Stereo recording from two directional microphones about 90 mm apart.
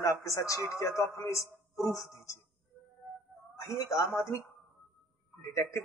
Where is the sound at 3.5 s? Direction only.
35° left (ahead or behind).